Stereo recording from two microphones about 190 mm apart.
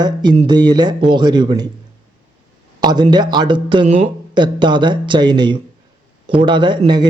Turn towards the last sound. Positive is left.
turn(degrees=-25)  # may be behind; listen again after turning